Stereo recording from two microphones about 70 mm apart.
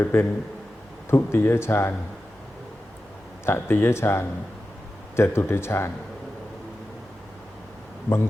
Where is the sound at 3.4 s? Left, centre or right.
Left.